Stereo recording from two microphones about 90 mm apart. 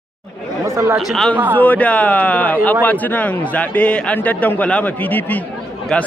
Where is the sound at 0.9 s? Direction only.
Centre (ahead or behind).